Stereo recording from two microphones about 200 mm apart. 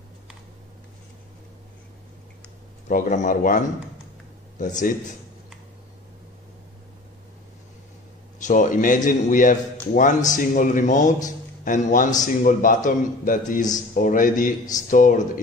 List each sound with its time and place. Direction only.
2.9 s a man's voice: 40° left (ahead or behind)
8.4 s a man's voice: 40° left (ahead or behind)